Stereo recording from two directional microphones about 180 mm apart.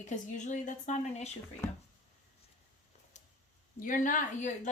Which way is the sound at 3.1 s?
40° left (ahead or behind).